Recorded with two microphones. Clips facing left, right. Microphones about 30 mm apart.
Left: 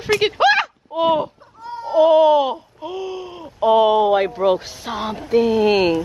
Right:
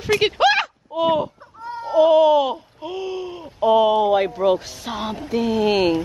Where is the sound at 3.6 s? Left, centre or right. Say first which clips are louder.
Left 2 dB; centre.